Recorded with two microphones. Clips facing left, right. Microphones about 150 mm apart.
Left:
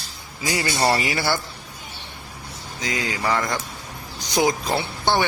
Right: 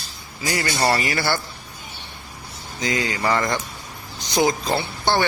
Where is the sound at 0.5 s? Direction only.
10° left (ahead or behind).